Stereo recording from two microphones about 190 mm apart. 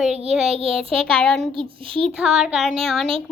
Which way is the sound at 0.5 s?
30° right (ahead or behind).